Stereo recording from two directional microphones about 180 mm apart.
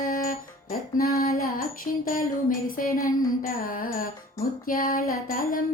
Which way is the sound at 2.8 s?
50° left (ahead or behind).